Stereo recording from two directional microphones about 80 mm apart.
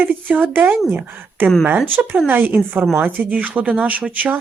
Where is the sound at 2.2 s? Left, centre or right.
Right.